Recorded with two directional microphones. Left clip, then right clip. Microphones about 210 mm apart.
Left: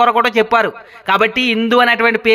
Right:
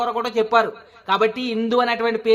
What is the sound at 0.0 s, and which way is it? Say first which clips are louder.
Speech: left 9 dB; 25° left (ahead or behind).